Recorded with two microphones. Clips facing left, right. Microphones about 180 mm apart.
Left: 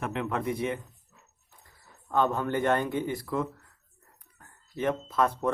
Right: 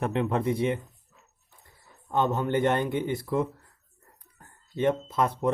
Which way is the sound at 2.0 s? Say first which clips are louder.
Right 1 dB; 20° right (ahead or behind).